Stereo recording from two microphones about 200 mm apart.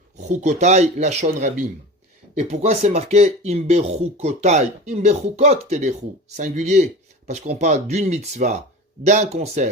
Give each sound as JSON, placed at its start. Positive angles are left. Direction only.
{"t": 0.2, "sound": "speech", "side_deg": -35}